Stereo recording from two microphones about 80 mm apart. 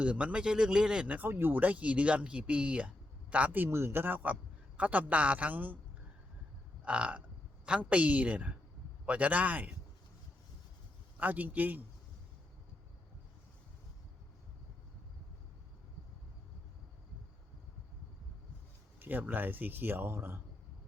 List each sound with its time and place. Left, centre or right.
0.0 s speech: centre
6.8 s speech: centre
11.2 s speech: right
18.9 s speech: right